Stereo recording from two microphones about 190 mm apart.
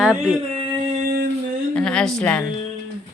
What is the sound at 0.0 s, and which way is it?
Speech, 5° right (ahead or behind).